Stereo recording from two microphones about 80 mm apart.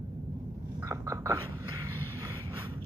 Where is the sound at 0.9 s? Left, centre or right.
Right.